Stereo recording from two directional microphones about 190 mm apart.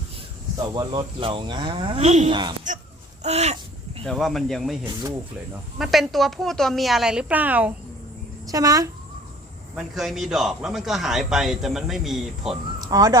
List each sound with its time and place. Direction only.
0.6 s cattle: 20° right (ahead or behind)
2.3 s cattle: 25° right (ahead or behind)
3.2 s a sound: 35° right (ahead or behind)
4.0 s a man's voice: centre (ahead or behind)
5.8 s a man's voice: centre (ahead or behind)
8.4 s cattle: 20° right (ahead or behind)
9.7 s a man's voice: centre (ahead or behind)
12.8 s speech: 20° right (ahead or behind)